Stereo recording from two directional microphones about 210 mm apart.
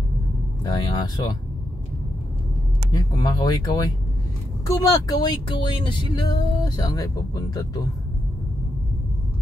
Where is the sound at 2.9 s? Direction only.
20° left (ahead or behind).